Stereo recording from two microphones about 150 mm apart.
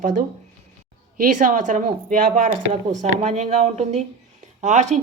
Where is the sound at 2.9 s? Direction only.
50° right (ahead or behind).